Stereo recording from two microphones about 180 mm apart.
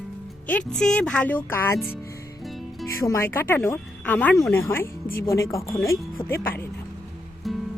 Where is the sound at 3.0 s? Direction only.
15° left (ahead or behind).